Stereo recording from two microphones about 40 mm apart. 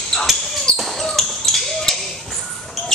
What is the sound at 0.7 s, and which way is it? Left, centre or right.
Basketball bounce, left.